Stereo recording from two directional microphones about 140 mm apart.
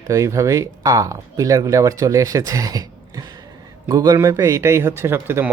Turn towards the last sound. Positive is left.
turn(degrees=-15)  # may be behind; listen again after turning